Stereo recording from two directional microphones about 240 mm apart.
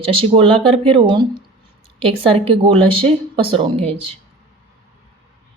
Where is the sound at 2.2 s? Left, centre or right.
Right.